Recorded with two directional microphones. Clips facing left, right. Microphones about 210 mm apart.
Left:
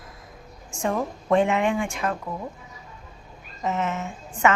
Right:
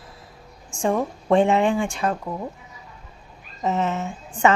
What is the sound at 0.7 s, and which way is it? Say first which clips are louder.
Speech: right 3 dB; 30° right (ahead or behind).